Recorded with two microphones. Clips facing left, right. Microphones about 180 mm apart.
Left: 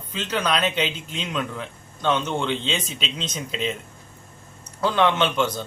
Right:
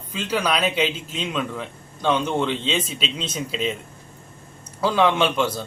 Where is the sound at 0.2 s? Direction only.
10° right (ahead or behind).